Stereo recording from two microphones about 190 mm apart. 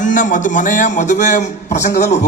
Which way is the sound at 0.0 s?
40° left (ahead or behind).